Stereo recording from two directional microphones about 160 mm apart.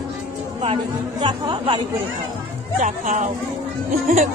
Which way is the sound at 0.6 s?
30° right (ahead or behind).